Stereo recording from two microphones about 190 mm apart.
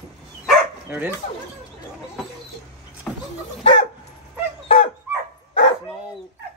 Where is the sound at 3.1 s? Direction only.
5° left (ahead or behind).